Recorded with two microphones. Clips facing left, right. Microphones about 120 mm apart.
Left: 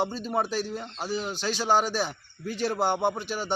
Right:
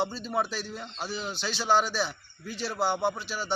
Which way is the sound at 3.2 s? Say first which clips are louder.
Left 3 dB; 50° left (ahead or behind).